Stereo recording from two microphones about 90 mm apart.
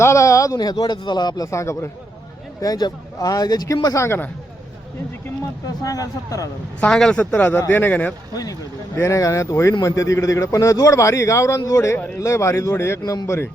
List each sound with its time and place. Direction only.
0.0 s a man's voice: 35° left (ahead or behind); by 1.5 s 50° left (ahead or behind)
1.5 s a man's voice: 35° left (ahead or behind)
2.6 s a man's voice: 45° left (ahead or behind)
4.0 s speech: 25° left (ahead or behind)
5.8 s a man's voice: 40° left (ahead or behind)
6.7 s a man's voice: 10° left (ahead or behind)
8.3 s a man's voice: 45° left (ahead or behind)